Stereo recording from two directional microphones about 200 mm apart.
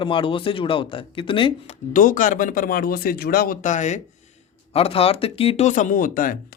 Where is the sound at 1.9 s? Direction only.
40° left (ahead or behind).